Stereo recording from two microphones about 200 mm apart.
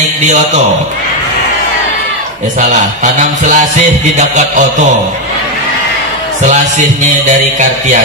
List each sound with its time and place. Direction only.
3.0 s speech: 40° right (ahead or behind)
6.4 s speech: 40° right (ahead or behind)